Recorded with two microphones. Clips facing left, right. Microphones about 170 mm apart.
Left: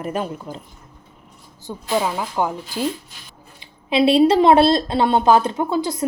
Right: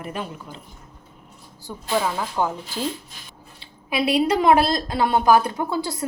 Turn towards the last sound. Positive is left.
turn(degrees=20)  # may be behind; listen again after turning